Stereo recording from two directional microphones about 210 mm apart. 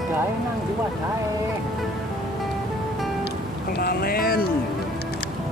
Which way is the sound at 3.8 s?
45° left (ahead or behind).